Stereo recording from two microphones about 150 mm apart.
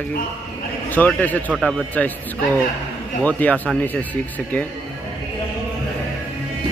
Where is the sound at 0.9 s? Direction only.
10° left (ahead or behind).